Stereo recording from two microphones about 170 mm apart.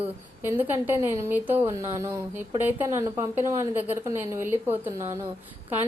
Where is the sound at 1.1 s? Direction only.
15° right (ahead or behind).